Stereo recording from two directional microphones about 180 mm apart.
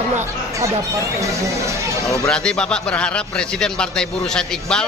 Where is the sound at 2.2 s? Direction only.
5° left (ahead or behind).